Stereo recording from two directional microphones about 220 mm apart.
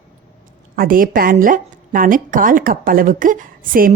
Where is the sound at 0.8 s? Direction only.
40° right (ahead or behind).